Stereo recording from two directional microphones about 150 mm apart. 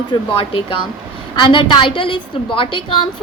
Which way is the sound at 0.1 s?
35° left (ahead or behind).